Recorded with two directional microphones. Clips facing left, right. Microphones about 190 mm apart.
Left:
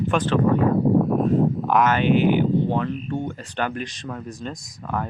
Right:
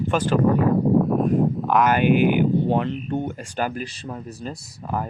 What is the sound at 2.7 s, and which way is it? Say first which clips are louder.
Speech: right 2 dB; 20° right (ahead or behind).